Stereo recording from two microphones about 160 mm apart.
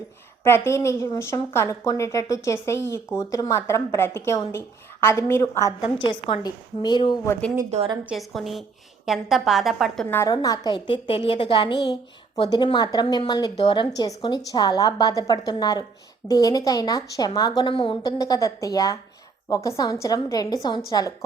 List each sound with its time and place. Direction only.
0.4 s a woman's voice: 15° left (ahead or behind)
6.0 s speech: 30° left (ahead or behind)
7.7 s a woman's voice: 45° right (ahead or behind)
8.1 s a woman's voice: centre (ahead or behind)
10.2 s speech: 25° left (ahead or behind)